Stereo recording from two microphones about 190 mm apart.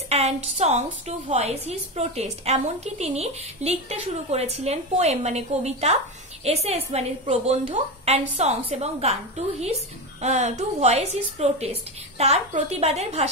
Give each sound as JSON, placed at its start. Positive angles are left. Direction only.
{"t": 0.1, "sound": "a woman's voice", "side_deg": -35}